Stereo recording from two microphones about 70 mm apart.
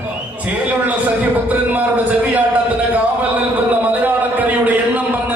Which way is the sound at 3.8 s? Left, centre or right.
Right.